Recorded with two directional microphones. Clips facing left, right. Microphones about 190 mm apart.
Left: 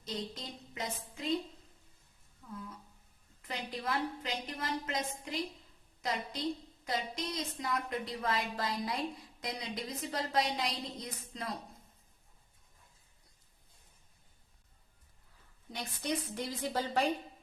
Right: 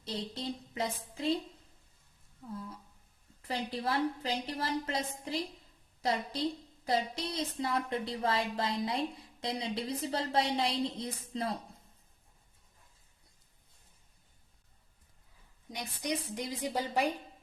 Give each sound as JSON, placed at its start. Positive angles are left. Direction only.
{"t": 0.0, "sound": "a woman's voice", "side_deg": -30}
{"t": 2.5, "sound": "a woman's voice", "side_deg": -30}
{"t": 15.7, "sound": "a woman's voice", "side_deg": -15}